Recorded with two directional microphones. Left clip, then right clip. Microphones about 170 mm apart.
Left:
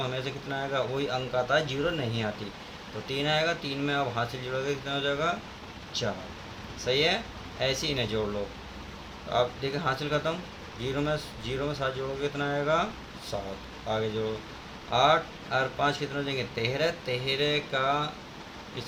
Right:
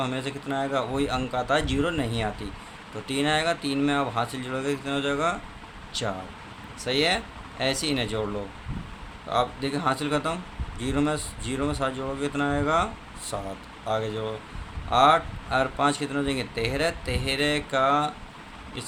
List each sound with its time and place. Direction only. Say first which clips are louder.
0.0 s a man's voice: right 3 dB; 35° right (ahead or behind)
6.8 s a man's voice: right 2 dB; 35° right (ahead or behind)
9.3 s a man's voice: right 2 dB; 35° right (ahead or behind)
14.8 s a man's voice: right 4 dB; 35° right (ahead or behind)